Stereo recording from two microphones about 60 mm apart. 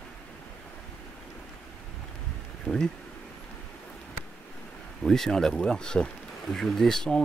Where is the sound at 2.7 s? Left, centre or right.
Left.